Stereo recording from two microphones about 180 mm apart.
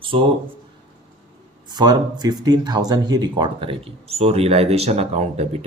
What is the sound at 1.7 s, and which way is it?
Speech, 20° right (ahead or behind).